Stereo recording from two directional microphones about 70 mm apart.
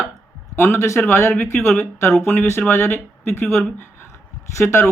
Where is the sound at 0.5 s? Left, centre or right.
Left.